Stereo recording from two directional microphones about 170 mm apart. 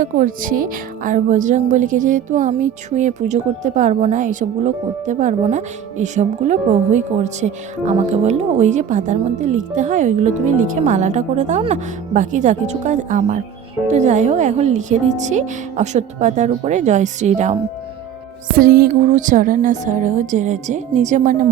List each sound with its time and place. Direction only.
0.0 s speech: 55° right (ahead or behind)
18.5 s speech: 60° right (ahead or behind); by 21.3 s 45° right (ahead or behind)